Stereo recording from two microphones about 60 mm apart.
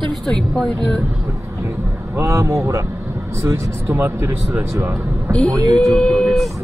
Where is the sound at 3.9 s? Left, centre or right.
Right.